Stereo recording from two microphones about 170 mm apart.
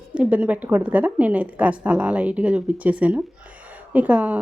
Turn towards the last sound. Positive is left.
turn(degrees=-10)  # may be behind; listen again after turning